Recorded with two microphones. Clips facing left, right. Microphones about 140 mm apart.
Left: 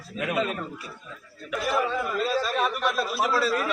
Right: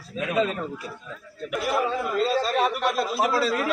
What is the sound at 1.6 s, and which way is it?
Speech, 20° right (ahead or behind).